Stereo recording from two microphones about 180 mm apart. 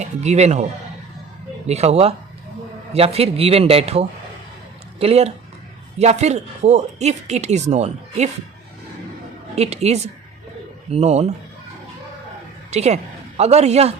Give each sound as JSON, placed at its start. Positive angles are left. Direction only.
{"t": 0.0, "sound": "a man's voice", "side_deg": -40}
{"t": 1.6, "sound": "a woman's voice", "side_deg": -35}
{"t": 9.6, "sound": "a woman's voice", "side_deg": -35}
{"t": 12.7, "sound": "a woman's voice", "side_deg": -35}